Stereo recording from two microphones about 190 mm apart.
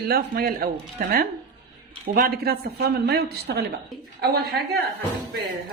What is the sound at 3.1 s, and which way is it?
Speech, 60° right (ahead or behind).